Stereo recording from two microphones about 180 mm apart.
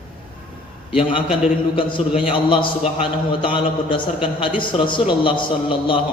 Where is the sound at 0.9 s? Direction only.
30° left (ahead or behind).